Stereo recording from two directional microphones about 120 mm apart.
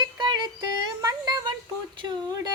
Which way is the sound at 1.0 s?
35° right (ahead or behind).